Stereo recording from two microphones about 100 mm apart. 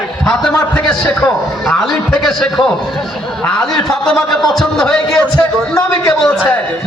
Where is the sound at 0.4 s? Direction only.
10° left (ahead or behind).